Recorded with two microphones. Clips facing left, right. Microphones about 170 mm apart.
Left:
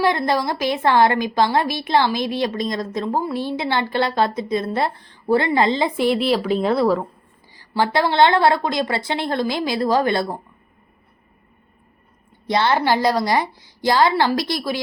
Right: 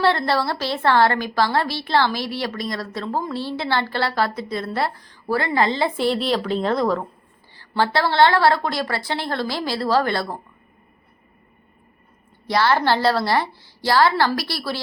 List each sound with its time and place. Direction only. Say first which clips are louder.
0.0 s a woman's voice: left 1 dB; 15° left (ahead or behind)
12.5 s a woman's voice: left 1 dB; 20° left (ahead or behind)